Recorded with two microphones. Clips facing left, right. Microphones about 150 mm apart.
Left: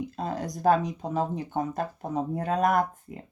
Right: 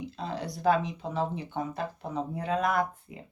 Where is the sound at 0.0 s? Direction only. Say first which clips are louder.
Left 3 dB; 50° left (ahead or behind).